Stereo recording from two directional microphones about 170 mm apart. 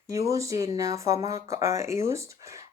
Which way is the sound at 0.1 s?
20° right (ahead or behind).